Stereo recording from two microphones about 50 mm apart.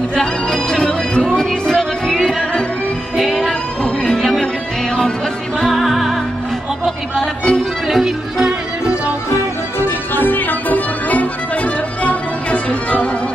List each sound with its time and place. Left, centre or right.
0.1 s music: centre
3.8 s music: centre
4.2 s music: centre
5.6 s music: centre
7.2 s music: centre
7.9 s music: centre
9.8 s music: left